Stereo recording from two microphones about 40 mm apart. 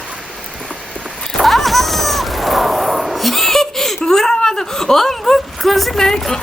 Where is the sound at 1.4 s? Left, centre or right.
Centre.